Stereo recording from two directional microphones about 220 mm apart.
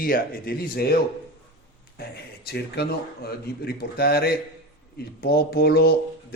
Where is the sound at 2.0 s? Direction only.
45° left (ahead or behind).